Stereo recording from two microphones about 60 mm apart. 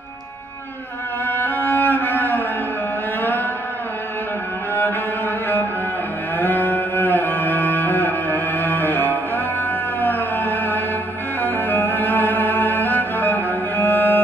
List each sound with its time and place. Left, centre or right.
1.2 s cello: left
6.3 s music: left
9.9 s a sound: left
11.4 s music: left